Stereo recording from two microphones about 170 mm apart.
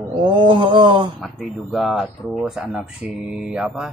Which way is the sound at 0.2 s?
30° right (ahead or behind).